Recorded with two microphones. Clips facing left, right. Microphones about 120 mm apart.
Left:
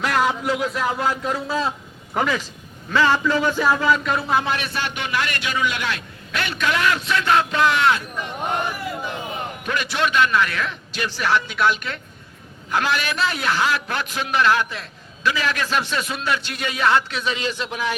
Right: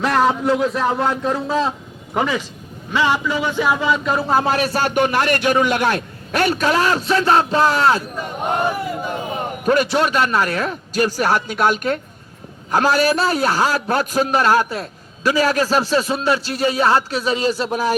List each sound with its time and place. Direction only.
0.0 s a sound: 30° right (ahead or behind)
0.7 s a man's voice: 30° right (ahead or behind)
2.1 s speech: 10° right (ahead or behind)
4.0 s a man's voice: 30° right (ahead or behind)